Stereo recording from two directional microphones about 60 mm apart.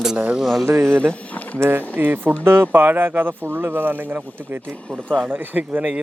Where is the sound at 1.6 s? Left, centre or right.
Right.